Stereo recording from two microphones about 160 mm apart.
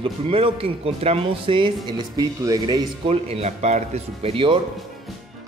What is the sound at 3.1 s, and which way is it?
A man's voice, 40° right (ahead or behind).